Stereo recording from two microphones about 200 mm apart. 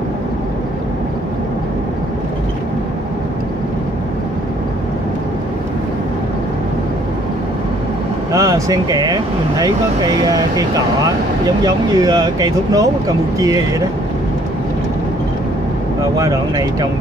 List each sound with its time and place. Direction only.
8.3 s speech: 15° right (ahead or behind)
11.6 s speech: 20° right (ahead or behind)
16.2 s speech: 15° right (ahead or behind)